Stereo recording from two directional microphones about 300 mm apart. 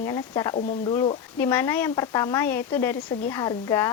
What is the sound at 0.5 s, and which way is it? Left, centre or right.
Speech, left.